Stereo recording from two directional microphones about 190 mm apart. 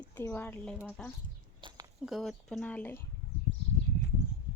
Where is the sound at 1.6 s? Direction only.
25° right (ahead or behind).